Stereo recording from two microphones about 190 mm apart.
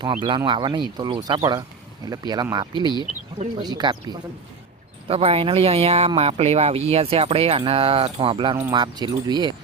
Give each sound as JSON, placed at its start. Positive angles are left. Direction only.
{"t": 0.0, "sound": "speech", "side_deg": -25}
{"t": 3.0, "sound": "speech", "side_deg": -35}
{"t": 3.6, "sound": "speech", "side_deg": -20}
{"t": 5.0, "sound": "speech", "side_deg": -30}